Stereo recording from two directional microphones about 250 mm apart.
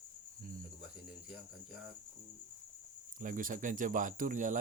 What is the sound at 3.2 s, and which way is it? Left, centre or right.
Speech, right.